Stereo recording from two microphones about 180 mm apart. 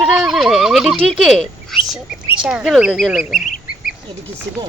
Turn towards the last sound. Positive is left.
turn(degrees=0)  # may be behind; listen again after turning